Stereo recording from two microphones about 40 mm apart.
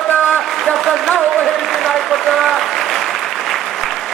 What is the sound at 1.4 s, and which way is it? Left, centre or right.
Applause, centre.